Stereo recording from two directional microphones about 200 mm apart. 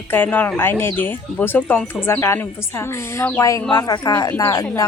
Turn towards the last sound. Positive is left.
turn(degrees=15)  # may be behind; listen again after turning